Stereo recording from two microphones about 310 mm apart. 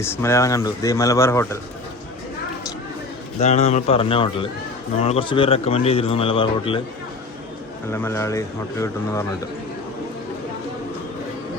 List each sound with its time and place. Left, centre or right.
0.0 s a man's voice: centre
3.4 s a man's voice: left
7.9 s a man's voice: centre